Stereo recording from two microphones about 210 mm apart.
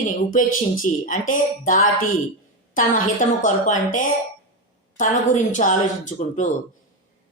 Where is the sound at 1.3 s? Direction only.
40° left (ahead or behind).